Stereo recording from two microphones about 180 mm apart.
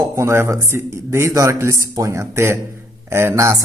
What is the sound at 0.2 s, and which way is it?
A man's voice, 15° right (ahead or behind).